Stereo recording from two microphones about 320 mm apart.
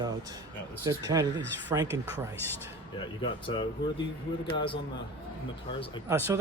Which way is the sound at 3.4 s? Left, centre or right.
Centre.